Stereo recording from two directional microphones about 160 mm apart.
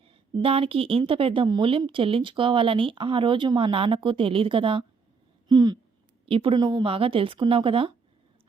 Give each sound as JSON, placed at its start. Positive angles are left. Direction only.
{"t": 0.0, "sound": "speech", "side_deg": -35}